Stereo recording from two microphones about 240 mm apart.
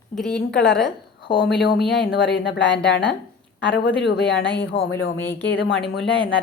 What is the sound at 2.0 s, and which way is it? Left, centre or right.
Speech, left.